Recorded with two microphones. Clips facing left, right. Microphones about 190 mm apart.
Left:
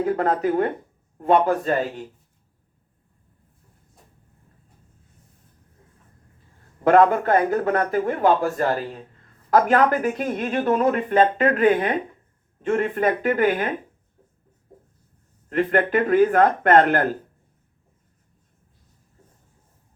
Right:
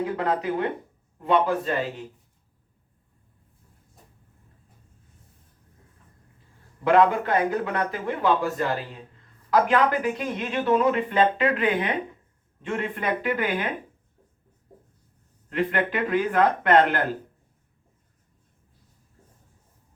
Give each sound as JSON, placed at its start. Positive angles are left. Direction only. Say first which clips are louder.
{"t": 0.0, "sound": "speech", "louder": "left 4 dB", "side_deg": 45}
{"t": 6.8, "sound": "speech", "louder": "left 3 dB", "side_deg": 50}
{"t": 15.4, "sound": "speech", "louder": "left 5 dB", "side_deg": 50}